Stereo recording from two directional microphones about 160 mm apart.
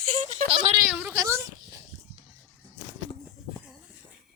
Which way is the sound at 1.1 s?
20° right (ahead or behind).